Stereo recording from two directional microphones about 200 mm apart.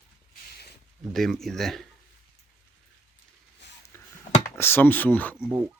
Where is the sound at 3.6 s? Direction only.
60° left (ahead or behind).